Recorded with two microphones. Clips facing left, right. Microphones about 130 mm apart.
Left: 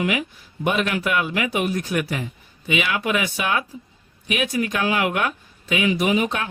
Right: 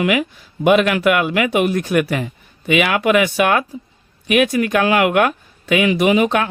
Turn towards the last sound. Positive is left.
turn(degrees=-75)  # may be behind; listen again after turning